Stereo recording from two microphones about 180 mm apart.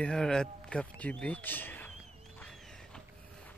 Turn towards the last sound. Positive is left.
turn(degrees=5)  # may be behind; listen again after turning